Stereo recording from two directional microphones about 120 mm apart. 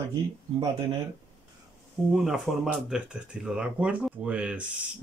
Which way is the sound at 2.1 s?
5° right (ahead or behind).